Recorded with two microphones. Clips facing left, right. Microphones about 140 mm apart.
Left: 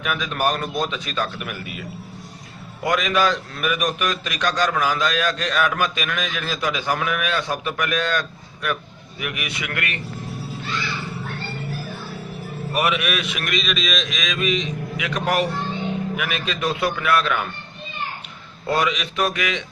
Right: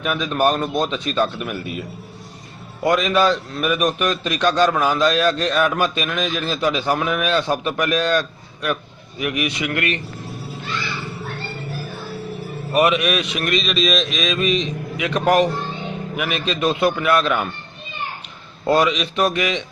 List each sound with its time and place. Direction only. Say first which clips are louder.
0.0 s a man's voice: right 4 dB; 30° right (ahead or behind)
2.8 s a man's voice: right 3 dB; 30° right (ahead or behind)
9.2 s a man's voice: right 7 dB; 25° right (ahead or behind)
12.7 s a man's voice: right 5 dB; 25° right (ahead or behind)
13.5 s a man's voice: right 6 dB; 35° right (ahead or behind)
18.7 s a man's voice: right 5 dB; 25° right (ahead or behind)